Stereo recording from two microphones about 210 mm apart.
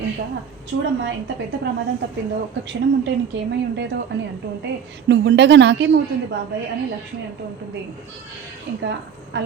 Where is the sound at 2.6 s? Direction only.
55° right (ahead or behind).